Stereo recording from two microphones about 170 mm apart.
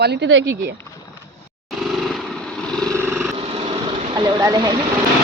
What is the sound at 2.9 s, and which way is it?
Vehicle, 15° right (ahead or behind).